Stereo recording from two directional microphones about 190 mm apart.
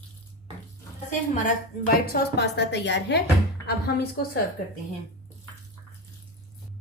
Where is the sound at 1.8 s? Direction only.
55° left (ahead or behind).